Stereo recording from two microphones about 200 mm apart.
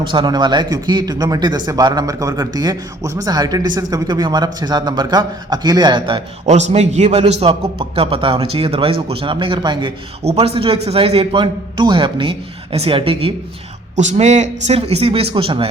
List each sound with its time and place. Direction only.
0.1 s a man's voice: 20° right (ahead or behind)